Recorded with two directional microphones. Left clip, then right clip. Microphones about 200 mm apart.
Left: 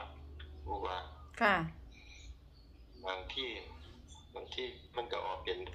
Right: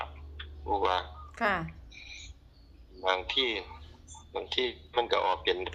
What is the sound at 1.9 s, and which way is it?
Cricket, 55° right (ahead or behind).